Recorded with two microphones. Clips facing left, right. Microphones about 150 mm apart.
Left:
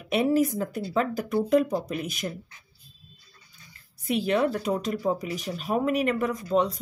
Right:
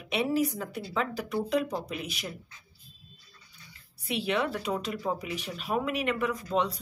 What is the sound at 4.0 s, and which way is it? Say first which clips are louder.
Speech: left 5 dB; 45° left (ahead or behind).